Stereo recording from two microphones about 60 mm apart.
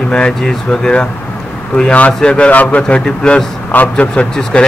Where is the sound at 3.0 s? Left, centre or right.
Centre.